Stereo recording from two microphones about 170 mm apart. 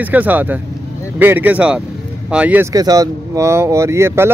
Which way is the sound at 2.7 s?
20° right (ahead or behind).